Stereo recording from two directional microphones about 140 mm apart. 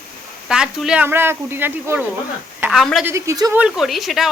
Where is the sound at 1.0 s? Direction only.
15° right (ahead or behind).